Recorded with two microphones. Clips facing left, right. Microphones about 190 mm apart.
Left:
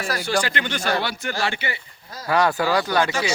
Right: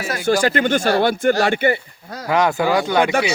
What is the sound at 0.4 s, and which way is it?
Speech, 45° right (ahead or behind).